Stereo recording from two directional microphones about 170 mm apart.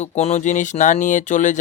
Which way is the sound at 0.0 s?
40° left (ahead or behind).